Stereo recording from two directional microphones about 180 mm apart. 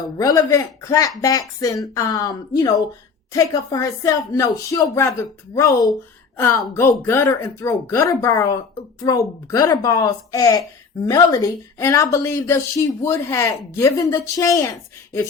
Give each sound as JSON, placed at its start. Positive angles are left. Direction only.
{"t": 0.0, "sound": "a woman's voice", "side_deg": 20}